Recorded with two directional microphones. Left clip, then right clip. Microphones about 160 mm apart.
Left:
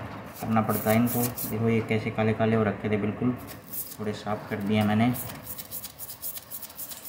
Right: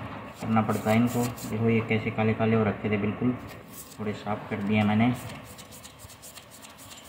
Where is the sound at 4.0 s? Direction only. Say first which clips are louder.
Left 1 dB; 15° left (ahead or behind).